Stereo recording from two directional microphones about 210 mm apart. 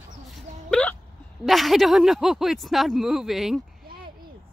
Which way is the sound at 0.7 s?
5° left (ahead or behind).